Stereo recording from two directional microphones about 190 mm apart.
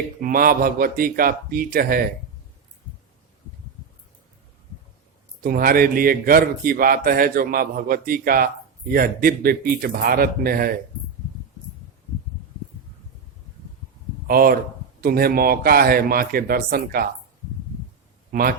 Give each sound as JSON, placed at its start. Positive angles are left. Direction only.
{"t": 0.2, "sound": "a man's voice", "side_deg": -50}
{"t": 5.4, "sound": "a man's voice", "side_deg": -50}
{"t": 14.3, "sound": "a man's voice", "side_deg": -50}
{"t": 18.3, "sound": "a man's voice", "side_deg": -50}